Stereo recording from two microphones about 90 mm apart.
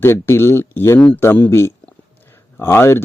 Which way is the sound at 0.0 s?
30° left (ahead or behind).